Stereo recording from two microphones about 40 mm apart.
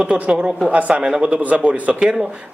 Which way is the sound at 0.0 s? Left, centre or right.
Right.